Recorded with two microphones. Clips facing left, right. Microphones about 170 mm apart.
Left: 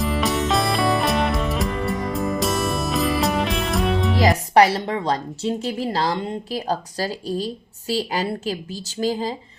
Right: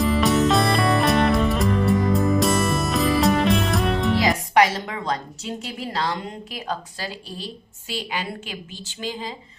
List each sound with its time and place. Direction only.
0.0 s music: centre (ahead or behind)
4.2 s speech: 35° left (ahead or behind)